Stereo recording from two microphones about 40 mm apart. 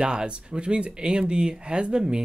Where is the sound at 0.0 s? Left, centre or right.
Right.